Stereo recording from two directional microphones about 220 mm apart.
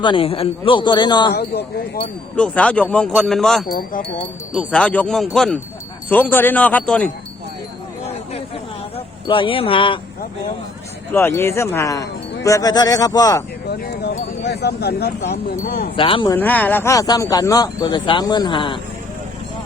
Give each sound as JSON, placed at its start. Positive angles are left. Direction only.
{"t": 0.0, "sound": "a man's voice", "side_deg": 25}
{"t": 1.3, "sound": "speech", "side_deg": 45}
{"t": 2.3, "sound": "speech", "side_deg": 5}
{"t": 9.2, "sound": "a man's voice", "side_deg": 25}
{"t": 11.1, "sound": "speech", "side_deg": 10}
{"t": 13.7, "sound": "speech", "side_deg": 45}
{"t": 16.0, "sound": "a man's voice", "side_deg": 25}
{"t": 16.3, "sound": "speech", "side_deg": 10}